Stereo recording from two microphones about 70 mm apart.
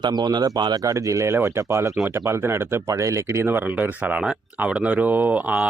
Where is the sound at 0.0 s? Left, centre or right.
Right.